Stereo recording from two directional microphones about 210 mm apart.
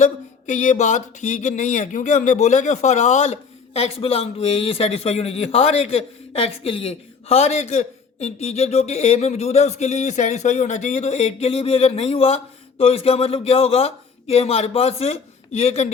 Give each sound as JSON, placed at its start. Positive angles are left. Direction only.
{"t": 0.0, "sound": "speech", "side_deg": 35}